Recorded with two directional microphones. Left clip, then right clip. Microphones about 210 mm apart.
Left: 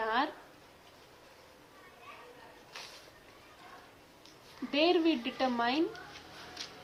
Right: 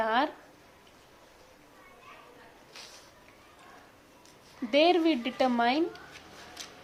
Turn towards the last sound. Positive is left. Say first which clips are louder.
# right 5 dB
turn(degrees=-50)  # may be behind; listen again after turning